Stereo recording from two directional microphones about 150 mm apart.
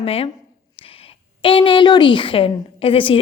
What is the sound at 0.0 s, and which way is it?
Speech, 40° left (ahead or behind).